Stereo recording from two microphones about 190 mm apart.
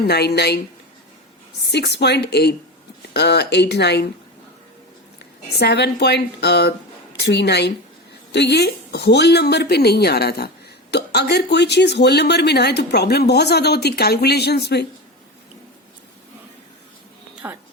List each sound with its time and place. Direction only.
0.0 s speech: 60° left (ahead or behind)
1.6 s speech: 65° left (ahead or behind)
5.5 s speech: 60° left (ahead or behind)
17.4 s a sound: 10° right (ahead or behind)